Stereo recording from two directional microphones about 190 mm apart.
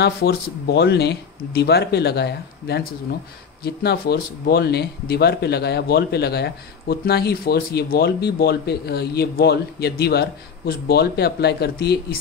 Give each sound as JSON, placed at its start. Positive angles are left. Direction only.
{"t": 0.0, "sound": "speech", "side_deg": 60}